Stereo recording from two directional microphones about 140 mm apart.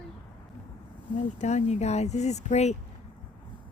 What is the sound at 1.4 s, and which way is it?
Speech, 55° left (ahead or behind).